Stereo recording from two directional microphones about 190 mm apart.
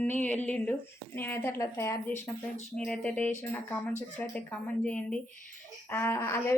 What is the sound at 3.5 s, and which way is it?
Speech, 10° left (ahead or behind).